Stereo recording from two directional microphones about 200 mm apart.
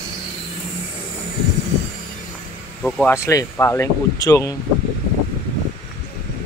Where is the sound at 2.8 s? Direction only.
5° left (ahead or behind).